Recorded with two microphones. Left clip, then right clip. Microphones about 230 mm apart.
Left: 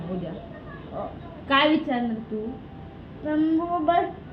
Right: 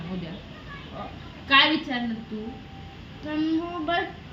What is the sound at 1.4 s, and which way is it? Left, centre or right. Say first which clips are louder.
Speech: right 1 dB; right.